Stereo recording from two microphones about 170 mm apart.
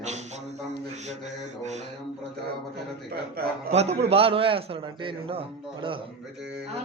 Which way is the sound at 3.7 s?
40° right (ahead or behind).